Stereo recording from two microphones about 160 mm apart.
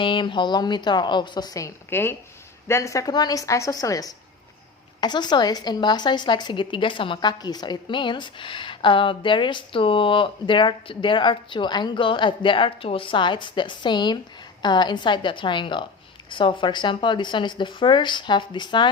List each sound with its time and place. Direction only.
0.0 s a woman's voice: 30° left (ahead or behind)